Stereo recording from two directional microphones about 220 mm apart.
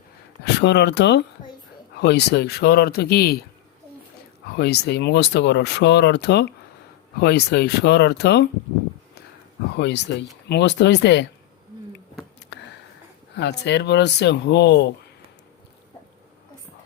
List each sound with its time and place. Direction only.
0.4 s speech: 50° left (ahead or behind)
4.5 s speech: 50° left (ahead or behind)
9.7 s speech: 50° left (ahead or behind)
12.5 s a sound: 50° left (ahead or behind)
13.3 s speech: 50° left (ahead or behind)